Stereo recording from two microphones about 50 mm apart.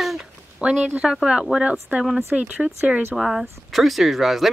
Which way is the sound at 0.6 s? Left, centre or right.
Right.